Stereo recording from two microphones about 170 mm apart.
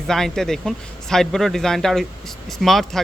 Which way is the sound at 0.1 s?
5° left (ahead or behind).